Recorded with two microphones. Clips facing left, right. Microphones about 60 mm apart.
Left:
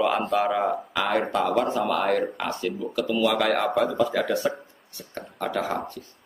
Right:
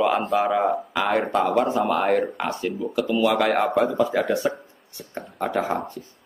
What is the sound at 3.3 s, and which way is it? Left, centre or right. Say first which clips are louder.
A man's voice: right 2 dB; centre.